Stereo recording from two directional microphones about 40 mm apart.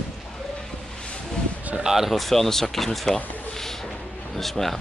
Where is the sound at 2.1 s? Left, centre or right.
Centre.